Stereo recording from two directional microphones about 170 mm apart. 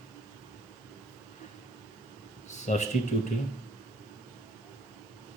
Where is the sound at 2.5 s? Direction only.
45° left (ahead or behind).